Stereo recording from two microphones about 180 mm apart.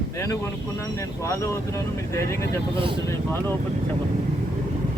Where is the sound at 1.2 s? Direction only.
15° left (ahead or behind).